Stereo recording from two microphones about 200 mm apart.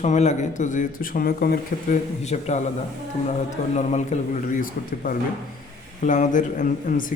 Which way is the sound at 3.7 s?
35° left (ahead or behind).